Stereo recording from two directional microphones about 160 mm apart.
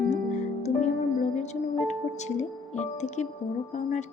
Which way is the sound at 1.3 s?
45° left (ahead or behind).